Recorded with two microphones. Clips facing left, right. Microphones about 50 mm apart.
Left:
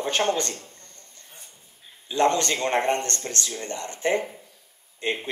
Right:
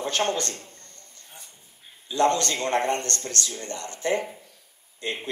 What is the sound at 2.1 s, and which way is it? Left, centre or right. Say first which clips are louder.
Speech: left 1 dB; left.